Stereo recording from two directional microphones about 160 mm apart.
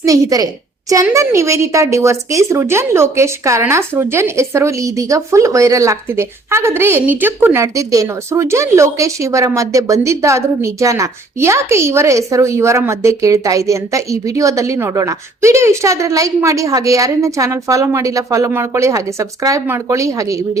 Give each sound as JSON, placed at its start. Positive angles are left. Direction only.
{"t": 0.0, "sound": "a woman's voice", "side_deg": -20}